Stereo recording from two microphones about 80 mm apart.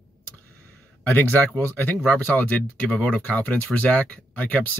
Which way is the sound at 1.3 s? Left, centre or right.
Left.